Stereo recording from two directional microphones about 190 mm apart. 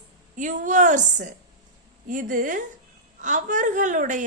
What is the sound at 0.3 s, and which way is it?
A woman's voice, 40° right (ahead or behind).